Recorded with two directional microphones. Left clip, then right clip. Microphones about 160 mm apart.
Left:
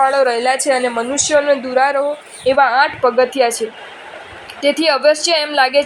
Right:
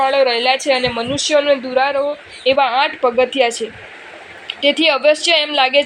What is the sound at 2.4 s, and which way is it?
A woman's voice, 25° left (ahead or behind).